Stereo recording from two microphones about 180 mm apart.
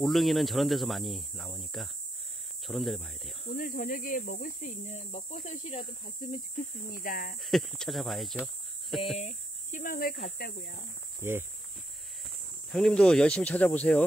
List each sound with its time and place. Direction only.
0.0 s speech: centre (ahead or behind)
3.5 s speech: 50° left (ahead or behind)
6.9 s speech: 50° left (ahead or behind)
7.3 s speech: centre (ahead or behind)
9.2 s speech: 45° left (ahead or behind)
11.1 s speech: 10° right (ahead or behind)
12.7 s speech: 5° left (ahead or behind)